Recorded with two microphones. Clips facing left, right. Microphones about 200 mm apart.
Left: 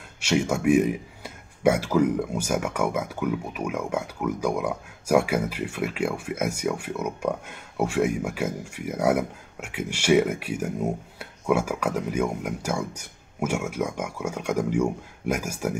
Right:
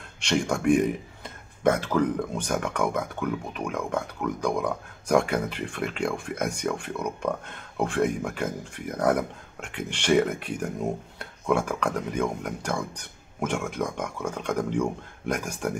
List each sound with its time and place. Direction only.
0.2 s speech: 5° left (ahead or behind)